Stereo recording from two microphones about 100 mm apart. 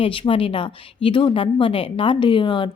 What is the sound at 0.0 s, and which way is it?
A woman's voice, 60° left (ahead or behind).